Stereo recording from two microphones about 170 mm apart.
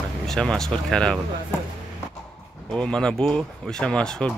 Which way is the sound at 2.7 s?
5° left (ahead or behind).